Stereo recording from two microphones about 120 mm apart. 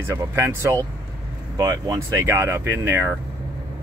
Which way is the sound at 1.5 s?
35° right (ahead or behind).